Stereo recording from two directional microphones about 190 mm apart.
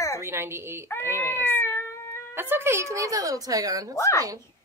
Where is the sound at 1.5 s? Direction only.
10° left (ahead or behind).